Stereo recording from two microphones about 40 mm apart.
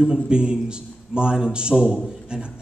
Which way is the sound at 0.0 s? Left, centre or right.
Right.